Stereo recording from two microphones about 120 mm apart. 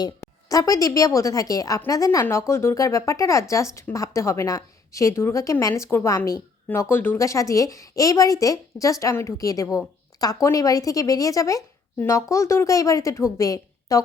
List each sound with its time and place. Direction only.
0.0 s a woman's voice: 30° left (ahead or behind)
9.7 s a sound: 30° left (ahead or behind)
10.4 s a woman's voice: 30° left (ahead or behind)